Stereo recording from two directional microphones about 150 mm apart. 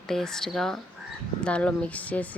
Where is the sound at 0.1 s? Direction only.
5° left (ahead or behind).